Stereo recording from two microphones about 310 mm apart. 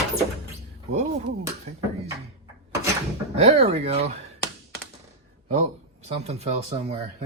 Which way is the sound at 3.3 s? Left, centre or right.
Centre.